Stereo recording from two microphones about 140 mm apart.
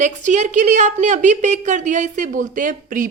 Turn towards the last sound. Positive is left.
turn(degrees=-70)  # may be behind; listen again after turning